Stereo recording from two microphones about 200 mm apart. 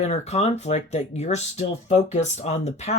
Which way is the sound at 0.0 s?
35° left (ahead or behind).